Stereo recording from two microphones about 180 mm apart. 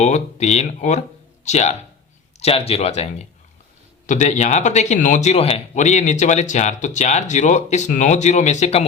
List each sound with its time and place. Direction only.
0.0 s speech: 40° left (ahead or behind)